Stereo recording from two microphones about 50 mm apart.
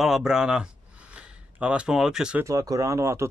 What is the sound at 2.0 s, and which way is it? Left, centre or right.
Speech, centre.